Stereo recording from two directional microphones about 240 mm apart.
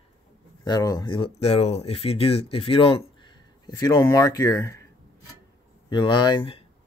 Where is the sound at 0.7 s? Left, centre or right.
Centre.